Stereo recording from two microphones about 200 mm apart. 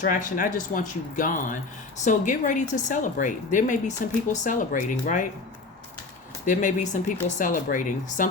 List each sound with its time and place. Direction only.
0.0 s a woman's voice: 40° left (ahead or behind)
6.4 s a woman's voice: 40° left (ahead or behind)